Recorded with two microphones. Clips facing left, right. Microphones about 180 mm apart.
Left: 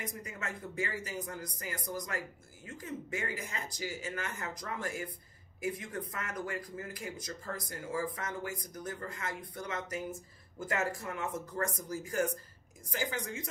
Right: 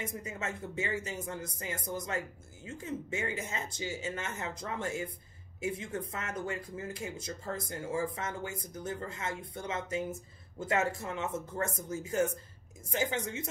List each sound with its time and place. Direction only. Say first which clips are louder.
0.0 s speech: right 3 dB; 25° right (ahead or behind)